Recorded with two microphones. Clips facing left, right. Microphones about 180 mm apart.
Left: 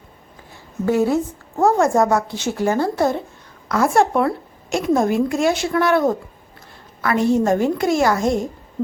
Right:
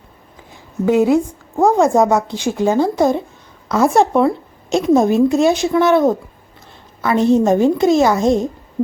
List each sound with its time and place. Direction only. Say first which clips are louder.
0.9 s a woman's voice: right 4 dB; 15° right (ahead or behind)